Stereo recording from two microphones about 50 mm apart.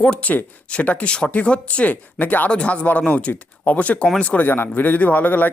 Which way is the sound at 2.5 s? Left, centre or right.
Left.